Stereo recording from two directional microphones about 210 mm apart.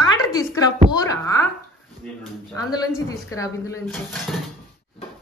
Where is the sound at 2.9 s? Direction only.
15° left (ahead or behind).